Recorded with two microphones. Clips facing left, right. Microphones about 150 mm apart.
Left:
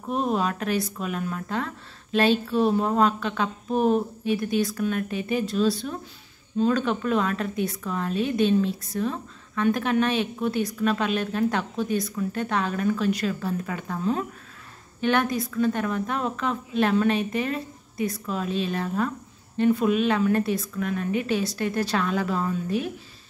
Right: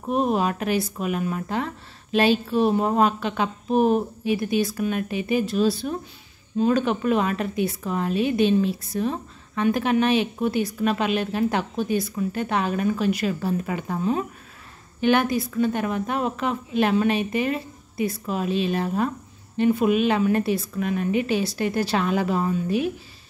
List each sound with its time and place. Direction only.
0.1 s a woman's voice: 15° right (ahead or behind)